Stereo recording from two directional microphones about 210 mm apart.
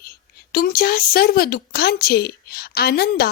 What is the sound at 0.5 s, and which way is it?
Speech, 45° left (ahead or behind).